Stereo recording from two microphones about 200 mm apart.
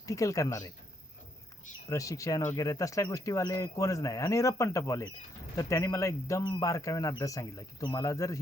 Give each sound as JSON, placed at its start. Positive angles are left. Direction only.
{"t": 0.0, "sound": "speech", "side_deg": 15}
{"t": 1.9, "sound": "speech", "side_deg": 15}